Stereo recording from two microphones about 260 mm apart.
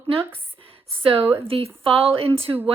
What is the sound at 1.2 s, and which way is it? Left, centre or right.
Speech, centre.